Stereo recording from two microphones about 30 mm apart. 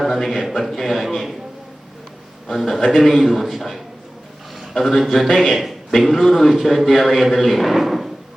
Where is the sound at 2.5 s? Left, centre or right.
Centre.